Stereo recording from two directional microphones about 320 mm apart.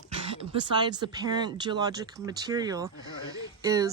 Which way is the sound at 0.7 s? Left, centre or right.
Centre.